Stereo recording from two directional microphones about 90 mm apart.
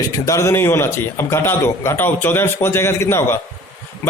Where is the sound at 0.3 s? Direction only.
35° left (ahead or behind).